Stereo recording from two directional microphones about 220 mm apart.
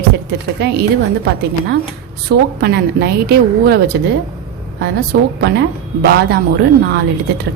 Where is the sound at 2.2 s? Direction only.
45° right (ahead or behind).